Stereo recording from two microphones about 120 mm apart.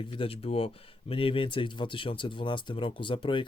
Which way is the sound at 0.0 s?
50° left (ahead or behind).